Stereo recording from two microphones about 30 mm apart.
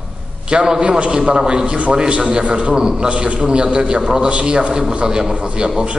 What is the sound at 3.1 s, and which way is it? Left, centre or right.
Speech, right.